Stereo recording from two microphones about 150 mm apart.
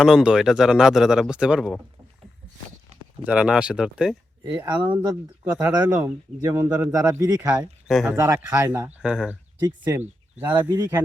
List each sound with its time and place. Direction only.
0.0 s a man's voice: 5° right (ahead or behind)
3.2 s speech: 10° right (ahead or behind)
4.6 s a man's voice: 25° right (ahead or behind)
5.5 s a man's voice: 15° right (ahead or behind)
7.9 s speech: centre (ahead or behind)
8.1 s speech: 20° right (ahead or behind)
9.0 s speech: 5° right (ahead or behind)
9.6 s a man's voice: 25° right (ahead or behind)
10.0 s speech: 10° right (ahead or behind)
10.5 s a man's voice: 25° right (ahead or behind)